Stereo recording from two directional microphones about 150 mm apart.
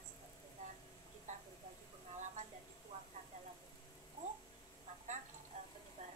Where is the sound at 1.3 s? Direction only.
55° right (ahead or behind).